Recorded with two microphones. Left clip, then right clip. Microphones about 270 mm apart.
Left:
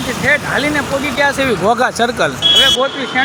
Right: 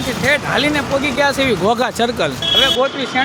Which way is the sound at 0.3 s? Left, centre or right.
Centre.